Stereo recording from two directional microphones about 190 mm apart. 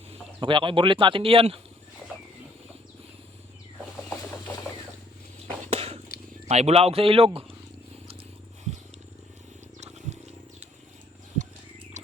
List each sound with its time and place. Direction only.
0.4 s speech: 25° right (ahead or behind)
5.7 s wild animals: 30° right (ahead or behind)
6.5 s speech: 35° right (ahead or behind)
12.0 s a sound: 40° right (ahead or behind)